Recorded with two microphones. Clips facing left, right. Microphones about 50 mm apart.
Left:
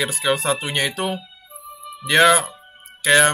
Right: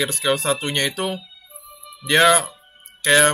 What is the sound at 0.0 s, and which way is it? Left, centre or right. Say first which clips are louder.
Speech: even; centre.